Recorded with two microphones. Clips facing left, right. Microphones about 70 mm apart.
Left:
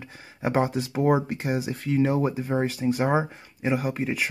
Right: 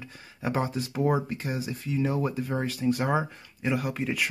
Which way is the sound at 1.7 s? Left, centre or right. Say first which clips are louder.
Left 5 dB; left.